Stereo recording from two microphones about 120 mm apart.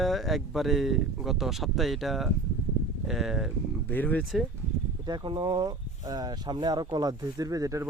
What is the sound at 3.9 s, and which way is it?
Speech, 15° left (ahead or behind).